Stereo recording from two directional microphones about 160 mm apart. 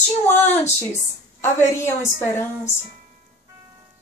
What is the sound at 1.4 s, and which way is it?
A woman's voice, 15° left (ahead or behind).